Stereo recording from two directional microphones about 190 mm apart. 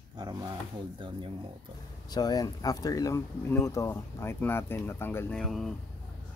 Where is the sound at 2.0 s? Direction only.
20° left (ahead or behind).